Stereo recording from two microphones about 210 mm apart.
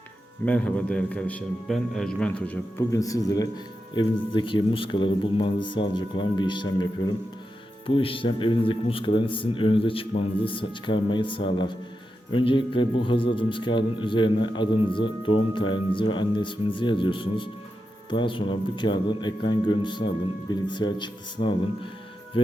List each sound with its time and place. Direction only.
0.4 s a man's voice: 5° left (ahead or behind)